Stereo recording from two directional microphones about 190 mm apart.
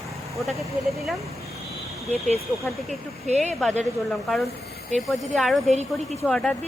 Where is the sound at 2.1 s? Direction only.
35° right (ahead or behind).